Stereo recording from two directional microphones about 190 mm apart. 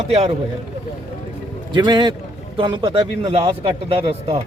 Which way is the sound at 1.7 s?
25° right (ahead or behind).